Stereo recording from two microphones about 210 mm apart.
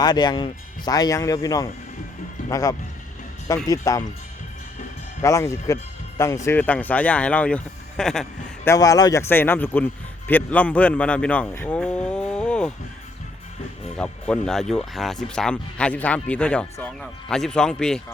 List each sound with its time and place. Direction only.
0.0 s a man's voice: 20° left (ahead or behind)
5.2 s speech: 15° left (ahead or behind)
8.7 s a man's voice: 15° left (ahead or behind)
14.0 s speech: 5° left (ahead or behind)